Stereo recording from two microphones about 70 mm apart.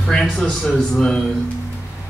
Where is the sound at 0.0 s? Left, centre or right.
Centre.